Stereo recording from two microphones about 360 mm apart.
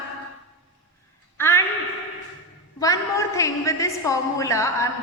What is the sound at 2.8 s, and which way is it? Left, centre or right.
A woman's voice, centre.